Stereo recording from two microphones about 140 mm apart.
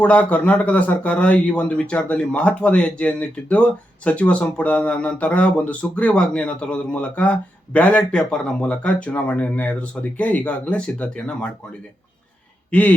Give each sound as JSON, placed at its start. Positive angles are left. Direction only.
{"t": 0.0, "sound": "a man's voice", "side_deg": 10}
{"t": 12.7, "sound": "a man's voice", "side_deg": 10}